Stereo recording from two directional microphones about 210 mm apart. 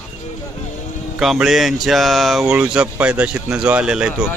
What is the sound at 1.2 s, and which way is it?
A man's voice, centre (ahead or behind).